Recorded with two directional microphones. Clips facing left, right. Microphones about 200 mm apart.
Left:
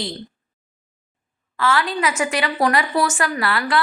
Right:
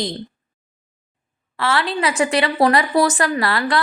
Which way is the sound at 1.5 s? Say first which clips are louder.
Even; 35° right (ahead or behind).